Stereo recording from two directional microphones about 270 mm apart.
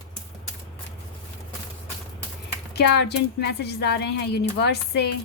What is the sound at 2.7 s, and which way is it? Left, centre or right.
A woman's voice, left.